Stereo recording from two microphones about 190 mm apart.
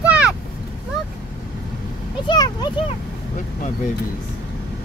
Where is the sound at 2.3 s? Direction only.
20° left (ahead or behind).